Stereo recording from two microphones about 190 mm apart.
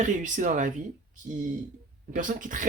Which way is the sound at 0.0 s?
40° right (ahead or behind).